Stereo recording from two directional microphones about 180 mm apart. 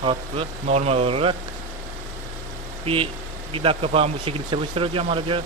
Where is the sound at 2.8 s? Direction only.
30° right (ahead or behind).